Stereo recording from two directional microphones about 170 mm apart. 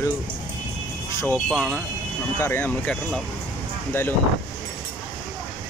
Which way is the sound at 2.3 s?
15° left (ahead or behind).